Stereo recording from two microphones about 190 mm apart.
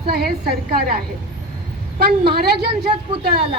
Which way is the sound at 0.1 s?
55° right (ahead or behind).